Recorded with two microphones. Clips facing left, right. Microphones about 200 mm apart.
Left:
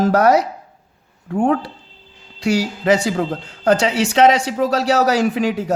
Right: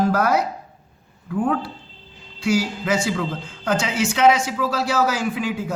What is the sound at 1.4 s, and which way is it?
Speech, 75° left (ahead or behind).